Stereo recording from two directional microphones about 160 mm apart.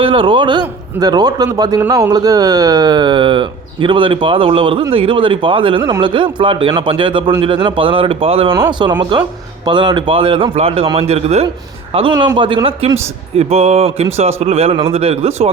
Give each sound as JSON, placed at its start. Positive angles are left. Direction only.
{"t": 0.0, "sound": "a man's voice", "side_deg": -35}
{"t": 12.1, "sound": "speech", "side_deg": -25}